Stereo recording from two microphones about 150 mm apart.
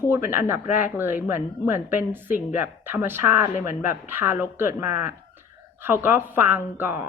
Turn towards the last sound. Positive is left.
turn(degrees=-15)  # may be behind; listen again after turning